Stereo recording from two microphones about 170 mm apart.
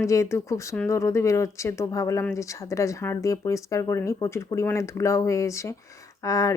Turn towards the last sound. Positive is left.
turn(degrees=20)  # may be behind; listen again after turning